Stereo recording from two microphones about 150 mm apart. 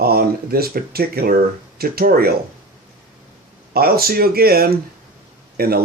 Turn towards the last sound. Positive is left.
turn(degrees=-90)